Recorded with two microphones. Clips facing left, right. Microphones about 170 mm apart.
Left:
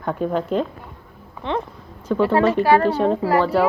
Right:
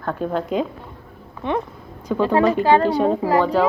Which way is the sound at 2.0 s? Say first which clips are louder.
Even; 15° right (ahead or behind).